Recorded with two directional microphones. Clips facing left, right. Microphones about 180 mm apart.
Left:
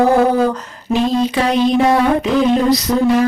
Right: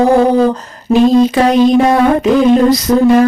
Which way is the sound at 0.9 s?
45° right (ahead or behind).